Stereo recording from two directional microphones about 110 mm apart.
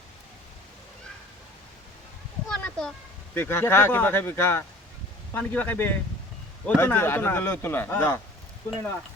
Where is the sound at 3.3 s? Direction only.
20° left (ahead or behind).